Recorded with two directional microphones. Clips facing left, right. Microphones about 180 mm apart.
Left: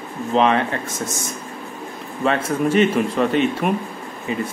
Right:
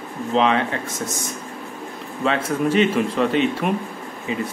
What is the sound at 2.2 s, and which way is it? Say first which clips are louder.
A man's voice: left 1 dB; 45° left (ahead or behind).